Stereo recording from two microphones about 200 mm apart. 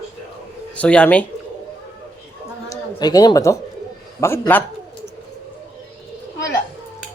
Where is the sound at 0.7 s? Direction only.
5° left (ahead or behind).